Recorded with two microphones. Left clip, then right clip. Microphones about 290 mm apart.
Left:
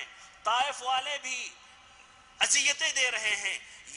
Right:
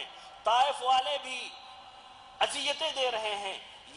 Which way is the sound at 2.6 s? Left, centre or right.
Left.